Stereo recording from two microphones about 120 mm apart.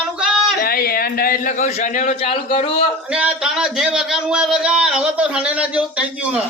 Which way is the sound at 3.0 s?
10° right (ahead or behind).